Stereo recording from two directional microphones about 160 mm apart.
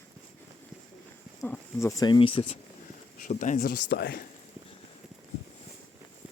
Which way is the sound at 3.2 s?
50° left (ahead or behind).